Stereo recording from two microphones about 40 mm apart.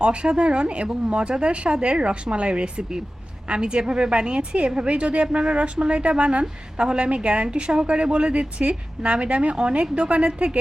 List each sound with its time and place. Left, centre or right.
0.0 s a woman's voice: right